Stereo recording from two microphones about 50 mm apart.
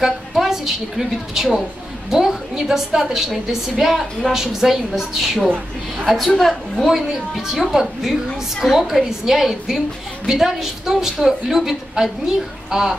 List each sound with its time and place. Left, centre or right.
0.0 s a woman's voice: centre